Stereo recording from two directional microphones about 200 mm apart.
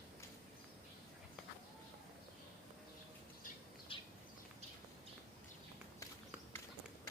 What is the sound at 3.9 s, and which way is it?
Bird, 25° left (ahead or behind).